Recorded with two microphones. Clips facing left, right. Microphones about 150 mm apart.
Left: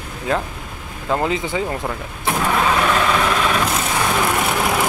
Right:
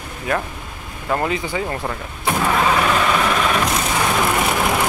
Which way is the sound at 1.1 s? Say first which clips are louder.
Left 1 dB; 20° left (ahead or behind).